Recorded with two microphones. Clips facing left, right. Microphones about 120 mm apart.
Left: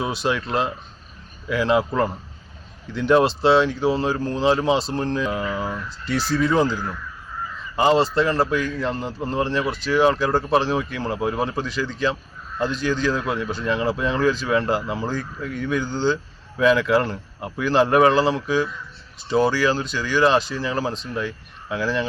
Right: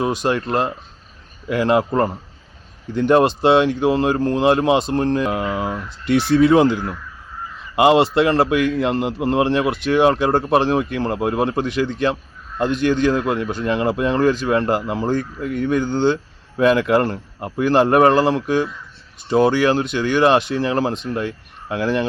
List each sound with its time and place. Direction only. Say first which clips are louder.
0.0 s speech: right 4 dB; 45° right (ahead or behind)
2.9 s a man's voice: right 3 dB; 50° right (ahead or behind)